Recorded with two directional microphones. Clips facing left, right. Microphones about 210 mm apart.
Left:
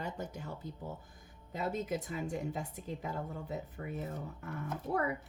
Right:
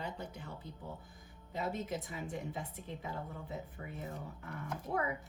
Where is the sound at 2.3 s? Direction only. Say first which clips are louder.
Left 4 dB; 45° left (ahead or behind).